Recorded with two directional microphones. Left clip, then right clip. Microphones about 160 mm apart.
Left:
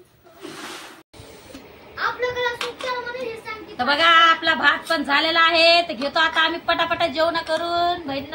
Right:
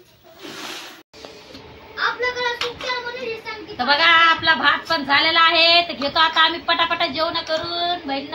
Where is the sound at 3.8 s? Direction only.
30° left (ahead or behind).